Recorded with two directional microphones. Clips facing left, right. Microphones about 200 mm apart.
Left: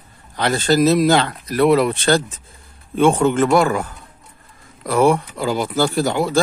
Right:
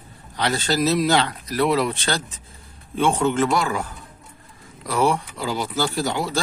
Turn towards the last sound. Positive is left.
turn(degrees=55)  # may be behind; listen again after turning